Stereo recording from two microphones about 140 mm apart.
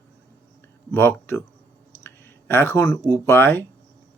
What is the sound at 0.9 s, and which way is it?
Speech, 15° left (ahead or behind).